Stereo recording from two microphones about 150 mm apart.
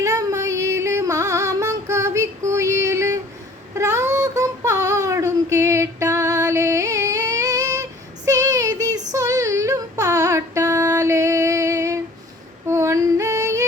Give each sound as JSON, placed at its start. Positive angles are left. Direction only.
{"t": 0.0, "sound": "music", "side_deg": -20}
{"t": 3.8, "sound": "child singing", "side_deg": -20}
{"t": 9.1, "sound": "a sound", "side_deg": -20}
{"t": 12.6, "sound": "female singing", "side_deg": -20}